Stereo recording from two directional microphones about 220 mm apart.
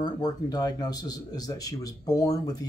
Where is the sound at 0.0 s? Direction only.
15° left (ahead or behind).